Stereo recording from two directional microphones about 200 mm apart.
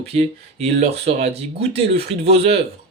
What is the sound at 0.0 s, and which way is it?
Speech, 30° right (ahead or behind).